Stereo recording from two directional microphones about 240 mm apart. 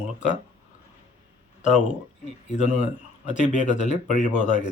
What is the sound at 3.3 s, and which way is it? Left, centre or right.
Speech, left.